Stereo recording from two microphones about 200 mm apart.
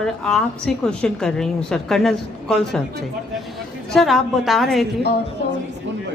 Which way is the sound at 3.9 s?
Centre (ahead or behind).